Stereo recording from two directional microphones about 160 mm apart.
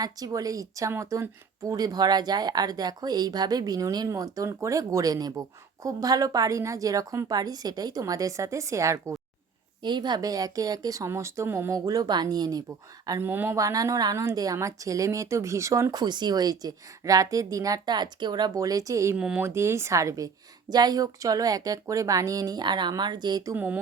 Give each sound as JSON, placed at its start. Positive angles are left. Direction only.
{"t": 0.0, "sound": "speech", "side_deg": -20}
{"t": 13.1, "sound": "speech", "side_deg": -15}
{"t": 19.1, "sound": "speech", "side_deg": -5}
{"t": 23.6, "sound": "speech", "side_deg": -10}